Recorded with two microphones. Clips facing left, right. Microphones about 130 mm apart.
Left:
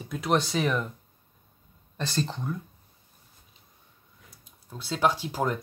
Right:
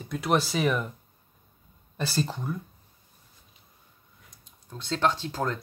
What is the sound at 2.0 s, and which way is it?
Speech, 5° right (ahead or behind).